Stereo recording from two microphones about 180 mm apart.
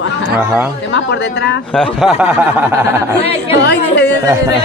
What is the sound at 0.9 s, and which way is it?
Speech, 75° left (ahead or behind).